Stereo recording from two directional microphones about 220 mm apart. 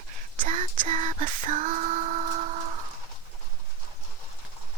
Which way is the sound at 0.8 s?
35° right (ahead or behind).